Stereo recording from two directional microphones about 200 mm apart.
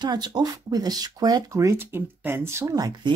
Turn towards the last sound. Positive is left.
turn(degrees=-20)  # may be behind; listen again after turning